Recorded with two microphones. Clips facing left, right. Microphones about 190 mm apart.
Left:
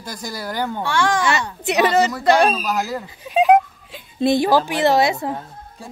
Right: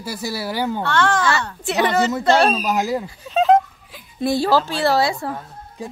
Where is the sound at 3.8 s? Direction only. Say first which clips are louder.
Left 3 dB; 25° left (ahead or behind).